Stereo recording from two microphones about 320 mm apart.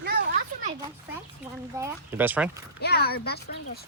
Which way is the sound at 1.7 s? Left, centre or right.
Centre.